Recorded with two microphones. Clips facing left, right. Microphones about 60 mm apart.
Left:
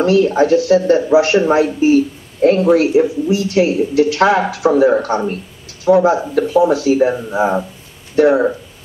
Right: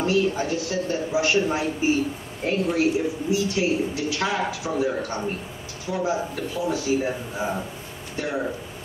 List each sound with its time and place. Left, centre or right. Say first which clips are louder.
0.0 s a woman's voice: left 10 dB; left
8.2 s a woman's voice: left 16 dB; left